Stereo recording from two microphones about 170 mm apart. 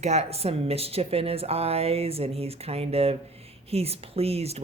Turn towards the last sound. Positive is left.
turn(degrees=-35)  # may be behind; listen again after turning